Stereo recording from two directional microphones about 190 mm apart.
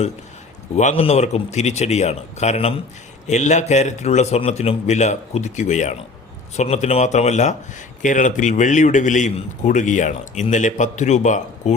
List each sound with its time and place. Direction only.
0.8 s a man's voice: 35° left (ahead or behind)